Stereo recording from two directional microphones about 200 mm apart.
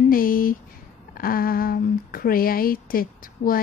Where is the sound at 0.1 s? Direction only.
45° left (ahead or behind).